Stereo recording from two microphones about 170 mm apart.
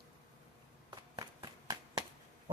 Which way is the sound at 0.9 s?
25° right (ahead or behind).